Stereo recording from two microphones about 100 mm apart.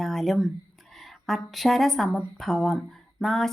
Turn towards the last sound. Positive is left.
turn(degrees=5)  # may be behind; listen again after turning